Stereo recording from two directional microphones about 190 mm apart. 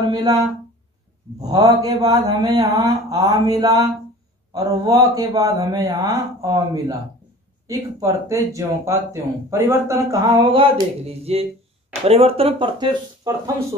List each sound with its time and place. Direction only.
0.0 s speech: 20° right (ahead or behind)
1.4 s speech: 20° right (ahead or behind)